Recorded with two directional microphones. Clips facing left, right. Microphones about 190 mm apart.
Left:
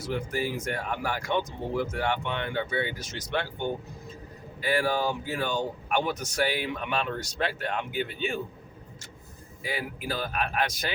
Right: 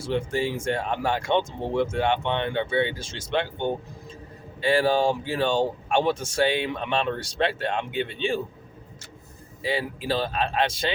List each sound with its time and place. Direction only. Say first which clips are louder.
0.0 s speech: right 4 dB; 25° right (ahead or behind)
9.6 s speech: right 6 dB; 30° right (ahead or behind)